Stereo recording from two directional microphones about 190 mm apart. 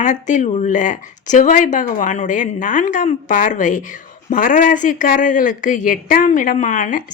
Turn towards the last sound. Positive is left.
turn(degrees=40)  # may be behind; listen again after turning